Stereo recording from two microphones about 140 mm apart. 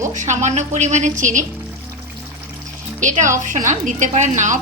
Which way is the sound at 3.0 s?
65° right (ahead or behind).